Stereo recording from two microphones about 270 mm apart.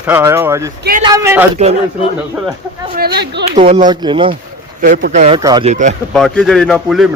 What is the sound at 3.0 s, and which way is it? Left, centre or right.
Speech, right.